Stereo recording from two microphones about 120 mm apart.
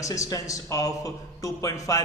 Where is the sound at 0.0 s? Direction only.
30° left (ahead or behind).